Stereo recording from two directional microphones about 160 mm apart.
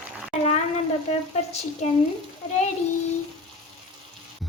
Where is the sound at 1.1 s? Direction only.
45° left (ahead or behind).